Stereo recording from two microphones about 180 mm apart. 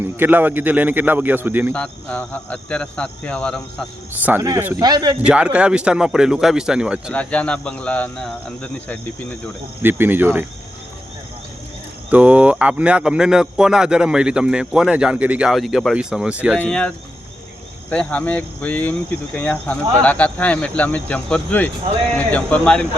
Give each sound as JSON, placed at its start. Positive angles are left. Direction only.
{"t": 0.0, "sound": "speech", "side_deg": -10}
{"t": 1.7, "sound": "speech", "side_deg": 5}
{"t": 4.2, "sound": "speech", "side_deg": -10}
{"t": 5.2, "sound": "speech", "side_deg": -5}
{"t": 7.1, "sound": "speech", "side_deg": 5}
{"t": 9.8, "sound": "speech", "side_deg": -10}
{"t": 12.1, "sound": "speech", "side_deg": -10}
{"t": 16.6, "sound": "speech", "side_deg": 5}